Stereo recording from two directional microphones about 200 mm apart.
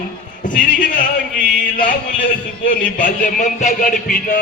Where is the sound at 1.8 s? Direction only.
40° left (ahead or behind).